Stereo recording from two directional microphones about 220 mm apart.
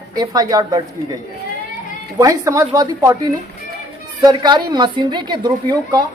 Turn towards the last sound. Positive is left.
turn(degrees=-20)  # may be behind; listen again after turning